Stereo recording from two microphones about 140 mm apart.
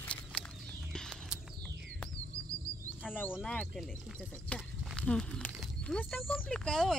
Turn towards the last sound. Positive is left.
turn(degrees=5)  # may be behind; listen again after turning